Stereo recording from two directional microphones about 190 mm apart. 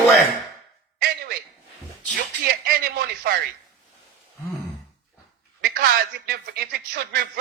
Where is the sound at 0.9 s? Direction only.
55° right (ahead or behind).